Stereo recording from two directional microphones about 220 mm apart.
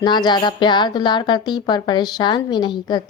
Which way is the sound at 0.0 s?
20° left (ahead or behind).